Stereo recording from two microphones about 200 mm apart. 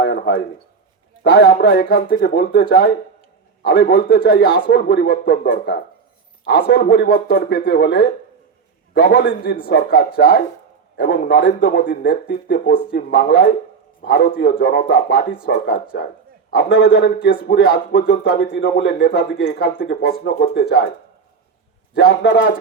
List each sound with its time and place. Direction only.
0.0 s speech: 55° left (ahead or behind)
21.9 s speech: 55° left (ahead or behind)